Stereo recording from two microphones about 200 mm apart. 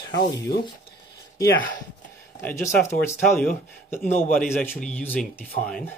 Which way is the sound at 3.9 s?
10° left (ahead or behind).